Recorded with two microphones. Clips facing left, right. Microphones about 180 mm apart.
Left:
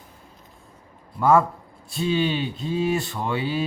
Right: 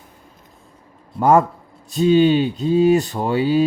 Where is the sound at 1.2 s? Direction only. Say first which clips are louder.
Right 4 dB; 40° right (ahead or behind).